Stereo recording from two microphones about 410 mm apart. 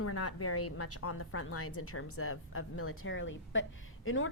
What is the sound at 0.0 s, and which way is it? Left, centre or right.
A woman's voice, left.